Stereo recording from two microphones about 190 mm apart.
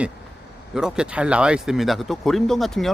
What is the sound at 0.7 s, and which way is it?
Speech, 5° right (ahead or behind).